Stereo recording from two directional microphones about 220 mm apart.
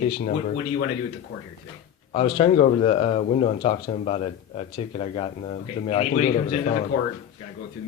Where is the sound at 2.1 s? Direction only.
25° left (ahead or behind).